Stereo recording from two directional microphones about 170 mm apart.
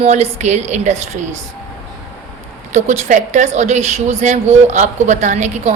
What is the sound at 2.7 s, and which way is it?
A woman's voice, 45° right (ahead or behind).